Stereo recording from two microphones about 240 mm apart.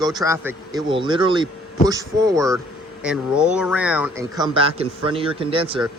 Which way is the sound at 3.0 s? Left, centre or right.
Centre.